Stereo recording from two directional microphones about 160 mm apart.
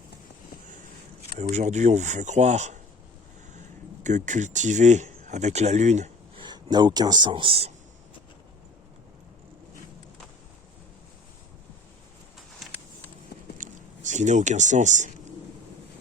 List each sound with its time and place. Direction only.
1.4 s speech: 45° right (ahead or behind)
4.0 s speech: 50° right (ahead or behind)
6.4 s a man's voice: 25° right (ahead or behind)
13.6 s a sound: 50° right (ahead or behind)